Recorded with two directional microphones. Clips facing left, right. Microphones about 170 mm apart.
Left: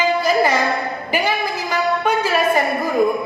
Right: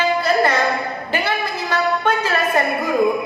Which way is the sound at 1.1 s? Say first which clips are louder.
Left 2 dB; 10° left (ahead or behind).